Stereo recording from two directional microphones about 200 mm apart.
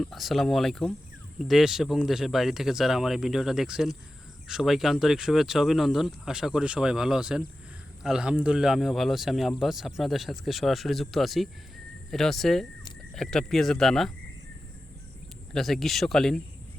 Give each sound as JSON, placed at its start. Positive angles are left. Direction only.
{"t": 0.0, "sound": "speech", "side_deg": 0}
{"t": 15.5, "sound": "speech", "side_deg": 0}